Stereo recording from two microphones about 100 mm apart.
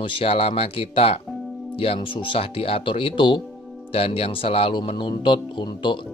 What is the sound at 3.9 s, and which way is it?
Speech, 75° left (ahead or behind).